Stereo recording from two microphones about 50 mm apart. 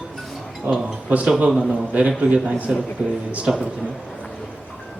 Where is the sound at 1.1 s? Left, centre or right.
Right.